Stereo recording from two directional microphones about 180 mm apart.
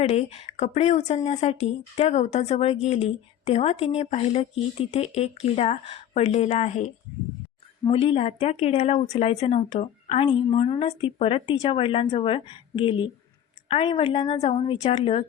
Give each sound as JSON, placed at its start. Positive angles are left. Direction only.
{"t": 0.0, "sound": "a woman's voice", "side_deg": 40}